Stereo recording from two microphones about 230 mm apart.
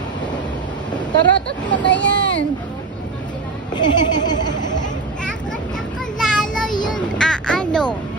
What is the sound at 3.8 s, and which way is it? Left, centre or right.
Speech, centre.